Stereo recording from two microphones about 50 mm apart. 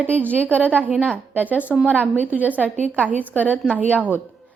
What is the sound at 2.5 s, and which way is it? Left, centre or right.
Speech, left.